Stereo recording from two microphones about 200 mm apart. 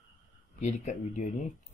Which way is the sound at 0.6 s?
35° left (ahead or behind).